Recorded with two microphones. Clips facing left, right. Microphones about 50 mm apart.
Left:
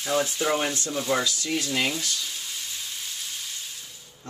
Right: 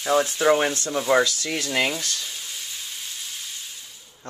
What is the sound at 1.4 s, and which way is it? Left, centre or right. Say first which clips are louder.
Speech: even; right.